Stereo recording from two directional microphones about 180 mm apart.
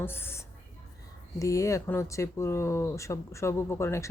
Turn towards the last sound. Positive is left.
turn(degrees=15)  # may be behind; listen again after turning